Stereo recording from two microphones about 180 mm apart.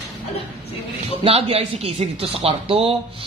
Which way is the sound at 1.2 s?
35° right (ahead or behind).